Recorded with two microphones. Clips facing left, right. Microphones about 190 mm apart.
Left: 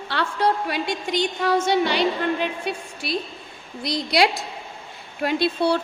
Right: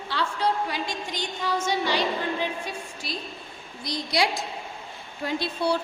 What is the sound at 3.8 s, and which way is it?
A woman's voice, 75° left (ahead or behind).